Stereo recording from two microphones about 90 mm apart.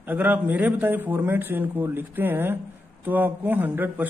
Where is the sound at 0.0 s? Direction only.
20° right (ahead or behind).